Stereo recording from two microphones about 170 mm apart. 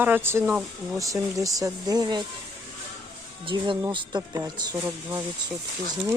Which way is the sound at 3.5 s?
25° right (ahead or behind).